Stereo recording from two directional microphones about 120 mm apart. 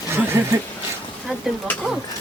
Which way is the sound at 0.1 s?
20° right (ahead or behind).